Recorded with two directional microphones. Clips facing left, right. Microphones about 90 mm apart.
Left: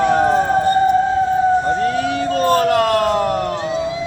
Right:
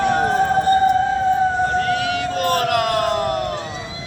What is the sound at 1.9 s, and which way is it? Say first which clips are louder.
Vehicle: left 1 dB; 65° right (ahead or behind).